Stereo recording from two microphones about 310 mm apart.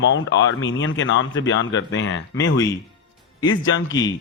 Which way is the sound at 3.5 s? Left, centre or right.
Left.